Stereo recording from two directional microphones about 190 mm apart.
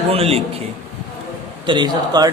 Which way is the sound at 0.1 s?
30° right (ahead or behind).